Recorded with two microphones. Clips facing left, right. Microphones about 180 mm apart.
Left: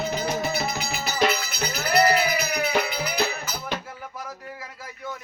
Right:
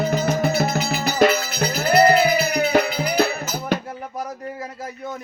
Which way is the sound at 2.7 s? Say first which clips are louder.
Right 7 dB; 45° right (ahead or behind).